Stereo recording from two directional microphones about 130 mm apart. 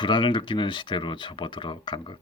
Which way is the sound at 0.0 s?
35° left (ahead or behind).